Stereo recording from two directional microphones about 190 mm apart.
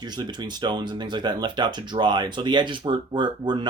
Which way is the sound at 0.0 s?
20° right (ahead or behind).